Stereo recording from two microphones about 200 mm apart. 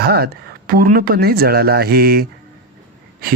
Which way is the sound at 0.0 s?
50° right (ahead or behind).